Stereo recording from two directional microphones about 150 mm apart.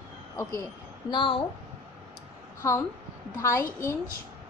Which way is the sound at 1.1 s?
35° left (ahead or behind).